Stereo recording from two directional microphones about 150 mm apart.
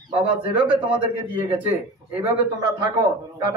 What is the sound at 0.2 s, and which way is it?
Speech, 10° right (ahead or behind).